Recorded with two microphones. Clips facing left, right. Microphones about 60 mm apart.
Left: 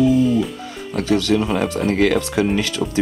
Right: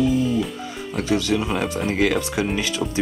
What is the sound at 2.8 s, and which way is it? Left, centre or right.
Speech, centre.